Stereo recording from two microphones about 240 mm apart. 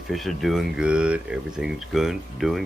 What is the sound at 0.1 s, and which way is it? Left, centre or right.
Speech, centre.